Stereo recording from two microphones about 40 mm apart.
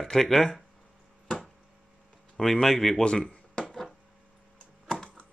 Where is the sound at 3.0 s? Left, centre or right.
Left.